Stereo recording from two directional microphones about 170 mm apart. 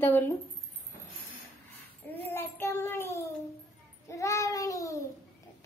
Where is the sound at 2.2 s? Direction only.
10° left (ahead or behind).